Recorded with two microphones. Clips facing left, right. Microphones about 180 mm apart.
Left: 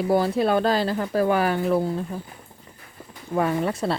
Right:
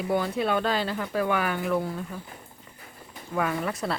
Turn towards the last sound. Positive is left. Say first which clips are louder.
# left 5 dB
turn(degrees=30)  # may be behind; listen again after turning